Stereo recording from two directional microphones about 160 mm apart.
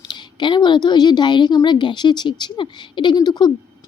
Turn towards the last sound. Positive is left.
turn(degrees=25)  # may be behind; listen again after turning